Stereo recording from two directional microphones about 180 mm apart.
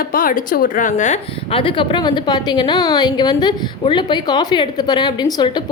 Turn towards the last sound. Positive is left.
turn(degrees=25)  # may be behind; listen again after turning